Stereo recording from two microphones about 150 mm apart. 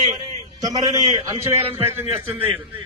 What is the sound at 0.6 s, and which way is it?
A man's voice, 25° right (ahead or behind).